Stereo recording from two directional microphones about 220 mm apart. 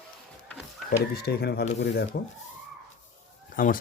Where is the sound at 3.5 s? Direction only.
40° left (ahead or behind).